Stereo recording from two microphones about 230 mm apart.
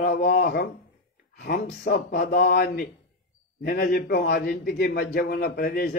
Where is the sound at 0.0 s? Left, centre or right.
Left.